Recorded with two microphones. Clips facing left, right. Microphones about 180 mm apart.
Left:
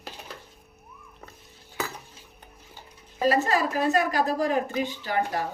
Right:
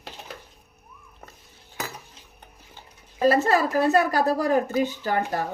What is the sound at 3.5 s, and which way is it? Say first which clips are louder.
Speech: right 4 dB; 40° right (ahead or behind).